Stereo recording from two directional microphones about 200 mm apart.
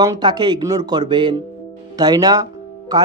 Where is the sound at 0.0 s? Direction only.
20° right (ahead or behind).